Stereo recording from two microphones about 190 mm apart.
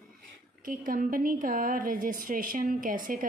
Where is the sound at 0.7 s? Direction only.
45° right (ahead or behind).